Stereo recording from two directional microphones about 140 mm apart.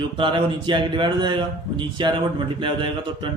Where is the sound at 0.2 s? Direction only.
35° right (ahead or behind).